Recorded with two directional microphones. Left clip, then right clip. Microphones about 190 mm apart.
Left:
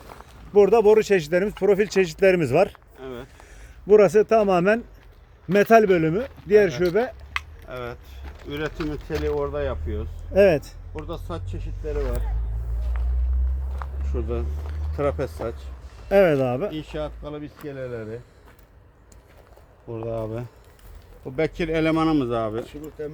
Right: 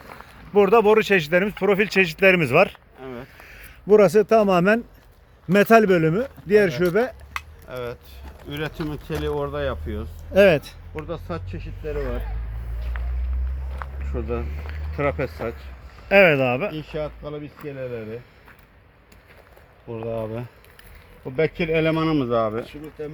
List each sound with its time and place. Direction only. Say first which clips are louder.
0.1 s speech: left 1 dB; 5° left (ahead or behind)
3.0 s a sound: even; 40° right (ahead or behind)
3.4 s a man's voice: even; 5° left (ahead or behind)
7.3 s a sound: even; 55° right (ahead or behind)
9.4 s speech: even; 45° right (ahead or behind)
10.3 s speech: right 2 dB; 5° left (ahead or behind)
11.0 s speech: right 2 dB; 35° right (ahead or behind)
12.9 s walk: right 5 dB; 5° right (ahead or behind)
14.1 s speech: right 1 dB; 40° right (ahead or behind)
16.0 s speech: right 3 dB; 15° left (ahead or behind)
16.7 s speech: right 1 dB; 30° right (ahead or behind); by 18.2 s 10° right (ahead or behind)
19.9 s speech: right 1 dB; 20° right (ahead or behind); by 22.6 s 40° right (ahead or behind)